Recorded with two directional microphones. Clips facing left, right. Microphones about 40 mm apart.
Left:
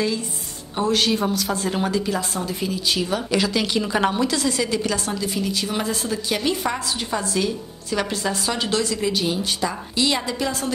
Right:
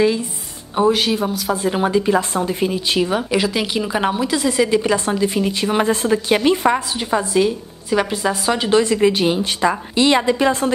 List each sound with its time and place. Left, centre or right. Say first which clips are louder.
0.7 s a woman's voice: right 4 dB; centre; by 6.8 s right
7.0 s a woman's voice: right 6 dB; centre